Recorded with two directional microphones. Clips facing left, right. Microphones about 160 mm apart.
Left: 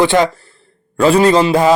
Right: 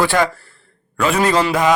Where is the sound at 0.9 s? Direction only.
30° left (ahead or behind).